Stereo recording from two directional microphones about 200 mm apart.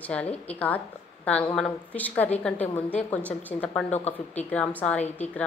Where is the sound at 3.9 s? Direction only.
35° left (ahead or behind).